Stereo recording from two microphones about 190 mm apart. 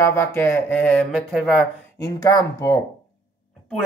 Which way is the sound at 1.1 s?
Centre (ahead or behind).